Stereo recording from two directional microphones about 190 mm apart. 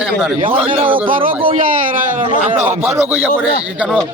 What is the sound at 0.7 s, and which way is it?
A man's voice, 45° right (ahead or behind).